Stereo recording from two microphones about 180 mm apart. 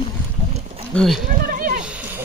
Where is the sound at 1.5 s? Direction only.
55° right (ahead or behind).